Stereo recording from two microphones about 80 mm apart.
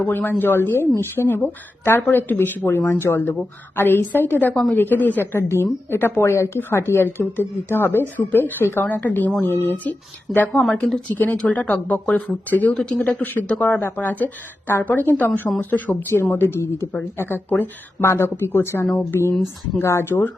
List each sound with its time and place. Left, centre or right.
0.0 s speech: left